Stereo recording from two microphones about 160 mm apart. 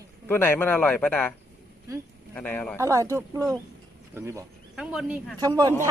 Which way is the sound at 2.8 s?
20° right (ahead or behind).